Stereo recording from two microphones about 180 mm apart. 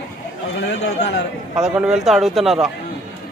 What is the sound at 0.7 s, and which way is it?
Speech, 70° left (ahead or behind).